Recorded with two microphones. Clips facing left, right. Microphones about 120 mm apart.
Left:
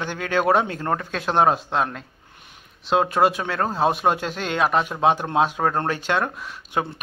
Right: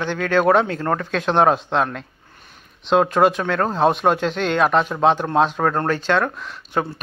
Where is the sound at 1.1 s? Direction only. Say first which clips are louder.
Right 3 dB; 5° left (ahead or behind).